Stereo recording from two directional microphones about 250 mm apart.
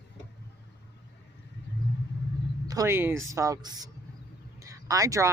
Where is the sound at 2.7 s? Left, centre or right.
Centre.